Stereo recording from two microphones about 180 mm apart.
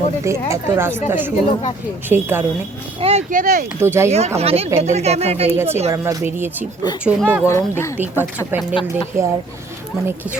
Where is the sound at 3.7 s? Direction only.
15° right (ahead or behind).